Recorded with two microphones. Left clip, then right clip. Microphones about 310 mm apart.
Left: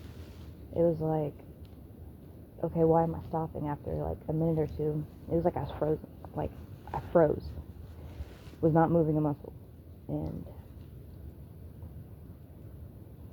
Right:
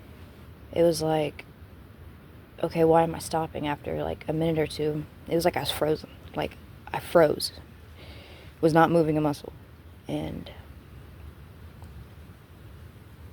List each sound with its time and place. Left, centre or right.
0.7 s speech: centre
2.6 s speech: right
8.6 s speech: right